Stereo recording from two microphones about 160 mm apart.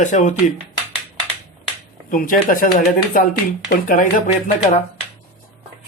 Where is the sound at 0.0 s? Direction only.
50° left (ahead or behind).